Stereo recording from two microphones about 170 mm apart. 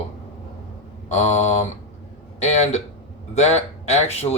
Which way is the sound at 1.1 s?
40° left (ahead or behind).